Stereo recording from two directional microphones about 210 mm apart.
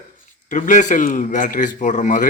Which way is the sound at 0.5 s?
35° left (ahead or behind).